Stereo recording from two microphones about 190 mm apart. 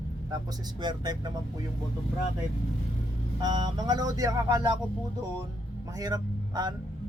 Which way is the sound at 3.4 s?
25° right (ahead or behind).